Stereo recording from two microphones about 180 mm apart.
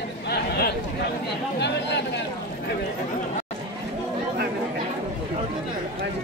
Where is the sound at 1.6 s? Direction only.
75° left (ahead or behind).